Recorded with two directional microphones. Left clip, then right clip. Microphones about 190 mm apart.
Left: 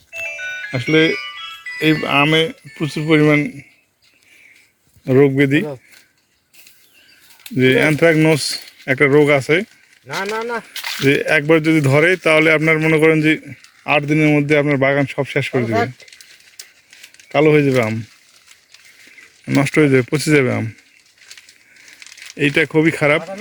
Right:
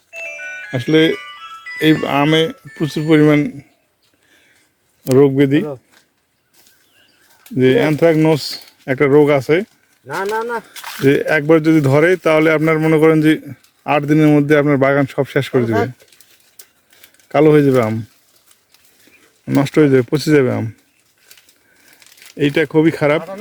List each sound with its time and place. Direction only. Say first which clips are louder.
0.2 s music: left 2 dB; 10° right (ahead or behind)
1.1 s music: left 2 dB; 5° left (ahead or behind)
2.0 s speech: even; 20° right (ahead or behind)
5.0 s speech: right 1 dB; 5° right (ahead or behind)
7.5 s speech: right 1 dB; 5° right (ahead or behind)
10.2 s speech: right 2 dB; 30° right (ahead or behind)
10.8 s a sound: left 4 dB; 15° left (ahead or behind)
11.0 s speech: right 1 dB; 15° right (ahead or behind)
15.6 s speech: right 1 dB; 10° right (ahead or behind)
17.2 s speech: right 2 dB; 25° right (ahead or behind)
19.5 s speech: right 1 dB; 5° right (ahead or behind)
22.4 s speech: right 1 dB; 5° right (ahead or behind)